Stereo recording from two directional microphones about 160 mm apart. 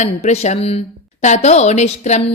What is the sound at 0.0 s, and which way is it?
Speech, 45° left (ahead or behind).